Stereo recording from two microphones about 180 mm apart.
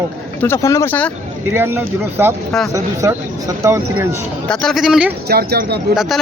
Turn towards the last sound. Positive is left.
turn(degrees=0)  # may be behind; listen again after turning